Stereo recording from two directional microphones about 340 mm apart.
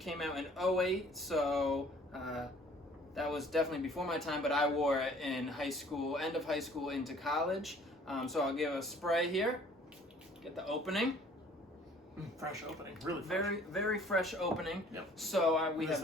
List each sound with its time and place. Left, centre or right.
0.0 s a man's voice: centre
13.0 s a man's voice: centre